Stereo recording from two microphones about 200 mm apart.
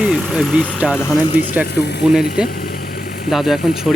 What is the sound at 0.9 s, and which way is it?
Speech, 15° left (ahead or behind).